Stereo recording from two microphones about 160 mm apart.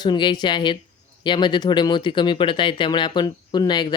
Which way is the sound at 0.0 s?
30° left (ahead or behind).